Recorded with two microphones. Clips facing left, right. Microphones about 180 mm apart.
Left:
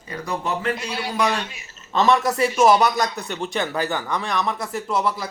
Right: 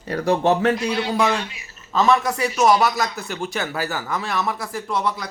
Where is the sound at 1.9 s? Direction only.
Centre (ahead or behind).